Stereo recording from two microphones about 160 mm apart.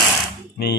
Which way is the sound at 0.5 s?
90° left.